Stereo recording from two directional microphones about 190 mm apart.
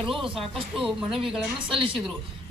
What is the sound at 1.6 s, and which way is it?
Speech, 25° right (ahead or behind).